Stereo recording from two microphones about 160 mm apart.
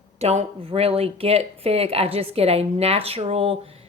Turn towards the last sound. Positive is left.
turn(degrees=-35)  # may be behind; listen again after turning